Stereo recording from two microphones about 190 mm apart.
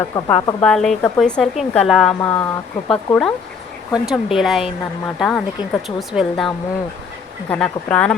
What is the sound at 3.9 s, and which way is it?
Speech, 5° right (ahead or behind).